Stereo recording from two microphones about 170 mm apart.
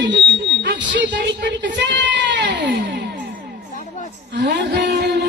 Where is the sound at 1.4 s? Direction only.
90° right.